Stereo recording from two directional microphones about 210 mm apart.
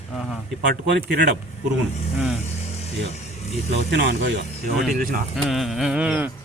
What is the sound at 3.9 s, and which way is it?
Speech, 55° right (ahead or behind).